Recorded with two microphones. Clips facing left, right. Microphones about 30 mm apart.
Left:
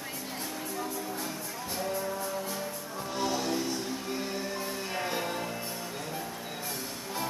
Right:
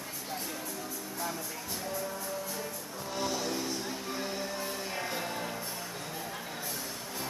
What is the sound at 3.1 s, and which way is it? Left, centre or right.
Music, centre.